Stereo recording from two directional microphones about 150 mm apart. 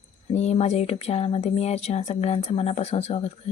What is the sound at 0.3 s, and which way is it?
A woman's voice, 45° left (ahead or behind).